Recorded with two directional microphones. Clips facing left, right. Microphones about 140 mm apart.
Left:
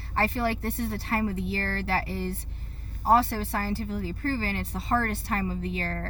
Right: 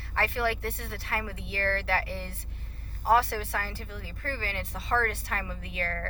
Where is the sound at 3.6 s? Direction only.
35° left (ahead or behind).